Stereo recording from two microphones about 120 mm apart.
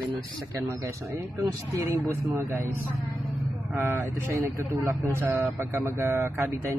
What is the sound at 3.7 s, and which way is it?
Speech, 15° right (ahead or behind).